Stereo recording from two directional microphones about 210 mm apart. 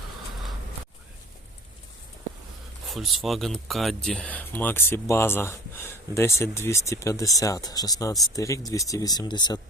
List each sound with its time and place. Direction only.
2.8 s speech: centre (ahead or behind); by 9.6 s 20° left (ahead or behind)